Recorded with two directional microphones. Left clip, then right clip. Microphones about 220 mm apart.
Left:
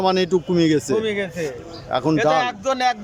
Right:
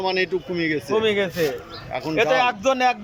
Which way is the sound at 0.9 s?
Centre (ahead or behind).